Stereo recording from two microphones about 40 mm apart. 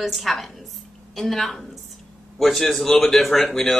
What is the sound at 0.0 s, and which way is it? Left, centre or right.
Speech, centre.